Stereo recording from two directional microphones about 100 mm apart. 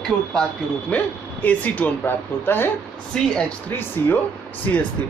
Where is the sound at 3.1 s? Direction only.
10° left (ahead or behind).